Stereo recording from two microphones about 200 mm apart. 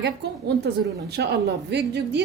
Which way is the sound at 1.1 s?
55° right (ahead or behind).